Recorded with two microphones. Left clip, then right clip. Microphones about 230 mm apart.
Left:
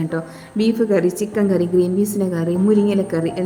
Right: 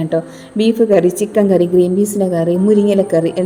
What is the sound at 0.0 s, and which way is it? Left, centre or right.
A woman's voice, centre.